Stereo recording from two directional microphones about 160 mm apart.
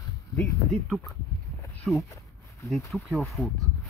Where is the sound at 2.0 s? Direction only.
20° left (ahead or behind).